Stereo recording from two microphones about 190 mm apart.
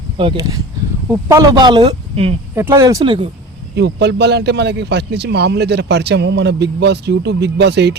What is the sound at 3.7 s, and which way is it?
Speech, 65° right (ahead or behind).